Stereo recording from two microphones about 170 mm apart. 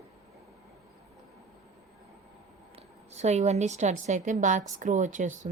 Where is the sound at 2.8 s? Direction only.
40° right (ahead or behind).